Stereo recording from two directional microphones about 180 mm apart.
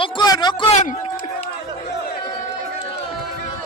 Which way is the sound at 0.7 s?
40° left (ahead or behind).